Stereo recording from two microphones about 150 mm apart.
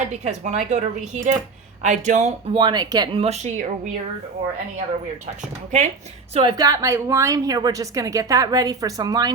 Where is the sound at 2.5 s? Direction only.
30° right (ahead or behind).